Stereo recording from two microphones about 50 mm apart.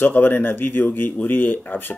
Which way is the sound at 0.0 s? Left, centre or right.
Left.